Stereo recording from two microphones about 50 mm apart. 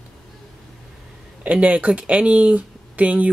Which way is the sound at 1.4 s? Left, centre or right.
Right.